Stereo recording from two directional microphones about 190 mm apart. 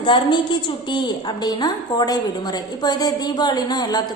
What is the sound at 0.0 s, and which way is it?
A woman's voice, 25° left (ahead or behind).